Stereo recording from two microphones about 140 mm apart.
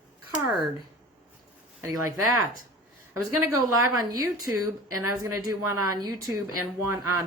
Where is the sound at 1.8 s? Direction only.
25° right (ahead or behind).